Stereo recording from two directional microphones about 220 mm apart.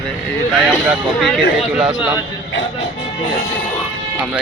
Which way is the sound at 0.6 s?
Centre (ahead or behind).